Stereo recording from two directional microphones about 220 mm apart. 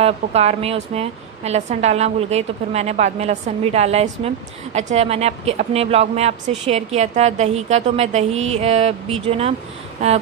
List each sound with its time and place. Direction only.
0.0 s a woman's voice: 30° right (ahead or behind)
10.0 s a woman's voice: 30° right (ahead or behind)